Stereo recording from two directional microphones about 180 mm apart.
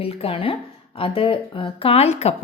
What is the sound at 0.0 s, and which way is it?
A woman's voice, 30° left (ahead or behind).